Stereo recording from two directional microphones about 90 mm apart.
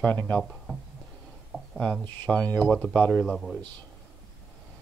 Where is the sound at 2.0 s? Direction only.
15° left (ahead or behind).